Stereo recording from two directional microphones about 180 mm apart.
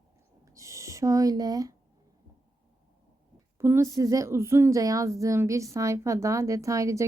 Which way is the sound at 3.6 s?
15° right (ahead or behind).